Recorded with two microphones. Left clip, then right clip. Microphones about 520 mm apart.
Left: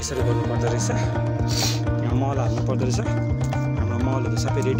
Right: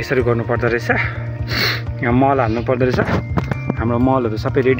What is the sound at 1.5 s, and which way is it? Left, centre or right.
Speech, left.